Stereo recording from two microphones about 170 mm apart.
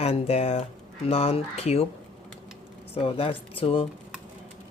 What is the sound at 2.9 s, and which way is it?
Speech, 35° left (ahead or behind).